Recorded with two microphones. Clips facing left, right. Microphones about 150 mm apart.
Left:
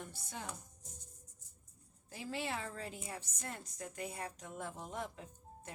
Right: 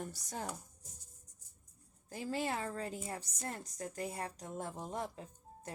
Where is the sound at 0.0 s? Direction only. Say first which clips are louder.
Right 4 dB; 40° right (ahead or behind).